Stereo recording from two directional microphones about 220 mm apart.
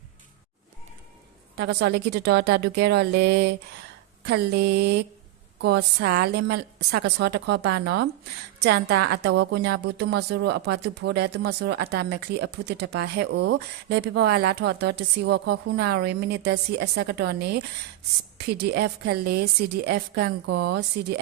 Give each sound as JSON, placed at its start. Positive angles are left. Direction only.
{"t": 1.5, "sound": "a woman's voice", "side_deg": -50}